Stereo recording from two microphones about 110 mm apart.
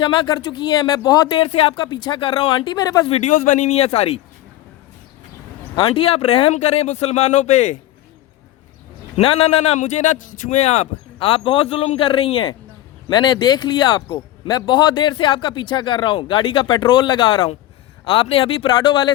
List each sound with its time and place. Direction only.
0.0 s a man's voice: 45° left (ahead or behind)
1.4 s a man's voice: 60° left (ahead or behind)
1.8 s a man's voice: 40° left (ahead or behind)
3.1 s speech: 90° left; by 4.2 s 70° left (ahead or behind)
5.7 s speech: 55° left (ahead or behind); by 7.8 s 90° left
9.1 s a man's voice: 60° left (ahead or behind)
13.1 s a man's voice: 40° left (ahead or behind)